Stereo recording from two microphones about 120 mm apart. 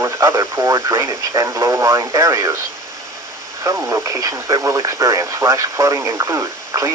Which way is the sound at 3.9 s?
25° right (ahead or behind).